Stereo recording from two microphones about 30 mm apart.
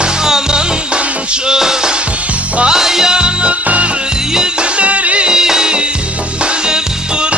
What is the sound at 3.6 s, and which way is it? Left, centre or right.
Music, right.